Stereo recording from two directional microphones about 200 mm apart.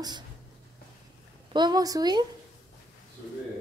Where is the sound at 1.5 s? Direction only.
20° right (ahead or behind).